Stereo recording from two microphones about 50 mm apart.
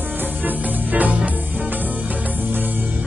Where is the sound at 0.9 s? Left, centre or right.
Right.